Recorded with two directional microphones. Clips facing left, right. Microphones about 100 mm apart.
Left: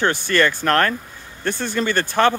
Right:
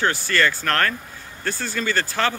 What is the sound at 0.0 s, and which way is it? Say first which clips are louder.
Speech: left 3 dB; 20° left (ahead or behind).